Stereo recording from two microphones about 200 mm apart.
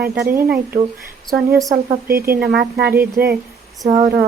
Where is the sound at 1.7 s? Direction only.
45° right (ahead or behind).